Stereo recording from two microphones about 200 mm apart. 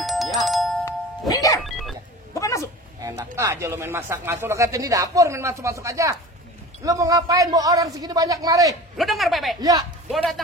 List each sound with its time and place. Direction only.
0.0 s music: centre (ahead or behind)
1.3 s music: 15° left (ahead or behind)
1.6 s a sound: centre (ahead or behind)
2.3 s dog: 15° left (ahead or behind)
3.0 s speech: 15° right (ahead or behind)
8.9 s speech: centre (ahead or behind)
9.6 s speech: 20° right (ahead or behind)
10.1 s speech: centre (ahead or behind)